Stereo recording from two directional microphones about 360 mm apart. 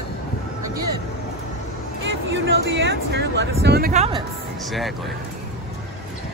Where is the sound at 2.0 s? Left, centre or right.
Right.